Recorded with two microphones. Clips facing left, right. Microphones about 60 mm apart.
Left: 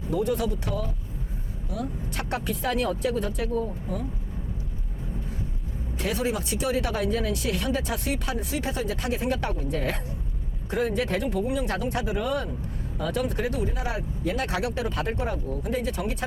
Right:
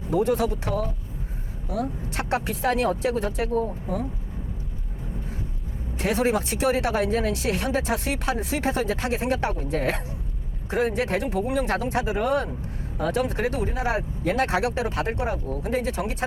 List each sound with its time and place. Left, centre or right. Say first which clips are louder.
0.1 s speech: right 4 dB; right
6.0 s speech: right 5 dB; right